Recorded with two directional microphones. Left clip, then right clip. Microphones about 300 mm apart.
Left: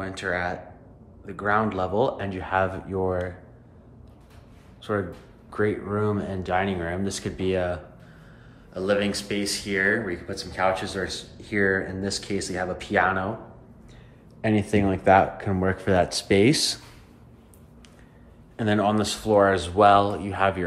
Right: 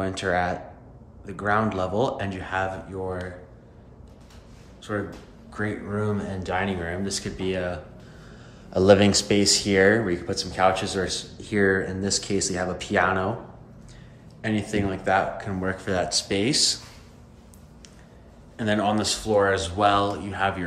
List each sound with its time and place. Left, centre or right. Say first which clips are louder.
0.0 s speech: right 3 dB; centre
4.9 s speech: left 2 dB; centre
8.7 s speech: right 7 dB; centre
14.4 s speech: left 3 dB; centre
18.6 s speech: left 1 dB; centre